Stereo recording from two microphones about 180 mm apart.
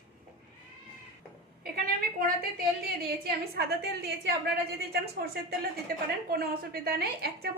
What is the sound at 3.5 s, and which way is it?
A woman's voice, 65° right (ahead or behind).